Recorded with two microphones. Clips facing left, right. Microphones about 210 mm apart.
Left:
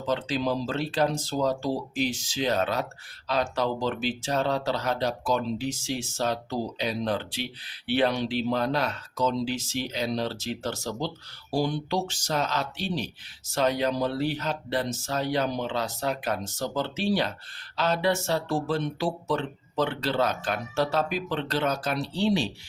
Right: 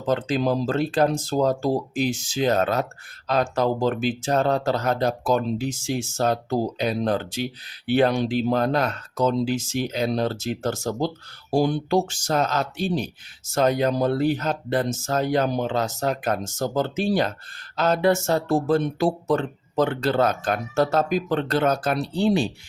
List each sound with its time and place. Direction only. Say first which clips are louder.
0.0 s speech: right 5 dB; 50° right (ahead or behind)